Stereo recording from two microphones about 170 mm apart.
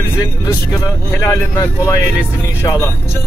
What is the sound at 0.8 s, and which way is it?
Speech, 20° left (ahead or behind).